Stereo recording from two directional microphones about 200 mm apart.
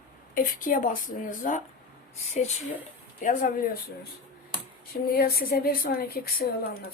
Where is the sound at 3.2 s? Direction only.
40° left (ahead or behind).